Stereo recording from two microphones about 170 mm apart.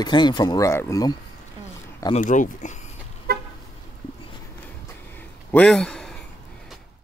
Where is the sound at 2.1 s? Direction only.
50° left (ahead or behind).